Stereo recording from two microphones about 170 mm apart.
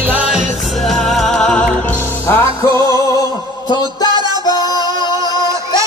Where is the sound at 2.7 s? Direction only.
20° left (ahead or behind).